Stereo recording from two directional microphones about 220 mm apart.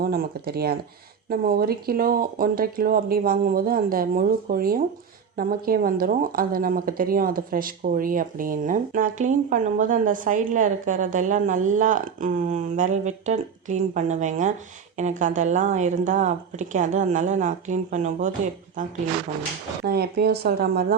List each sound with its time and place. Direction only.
0.0 s speech: 45° right (ahead or behind)
19.8 s speech: 45° right (ahead or behind)